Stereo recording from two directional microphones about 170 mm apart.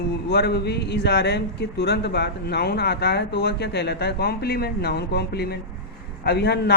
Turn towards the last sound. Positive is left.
turn(degrees=70)  # may be behind; listen again after turning